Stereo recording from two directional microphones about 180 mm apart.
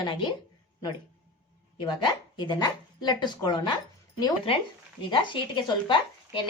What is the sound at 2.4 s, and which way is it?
Speech, 25° left (ahead or behind).